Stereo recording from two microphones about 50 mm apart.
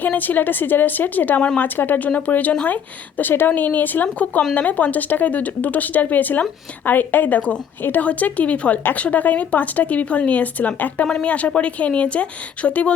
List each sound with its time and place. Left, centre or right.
0.0 s speech: left
7.8 s speech: left
8.0 s speech: left
11.0 s speech: left